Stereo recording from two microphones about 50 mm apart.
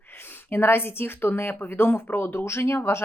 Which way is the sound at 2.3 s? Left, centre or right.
Left.